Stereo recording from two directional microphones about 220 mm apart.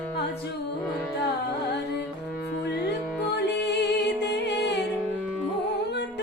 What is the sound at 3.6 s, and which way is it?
Music, 50° left (ahead or behind).